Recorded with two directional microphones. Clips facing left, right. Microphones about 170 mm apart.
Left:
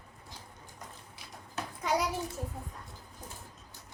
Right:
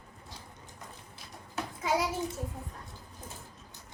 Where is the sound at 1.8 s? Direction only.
Centre (ahead or behind).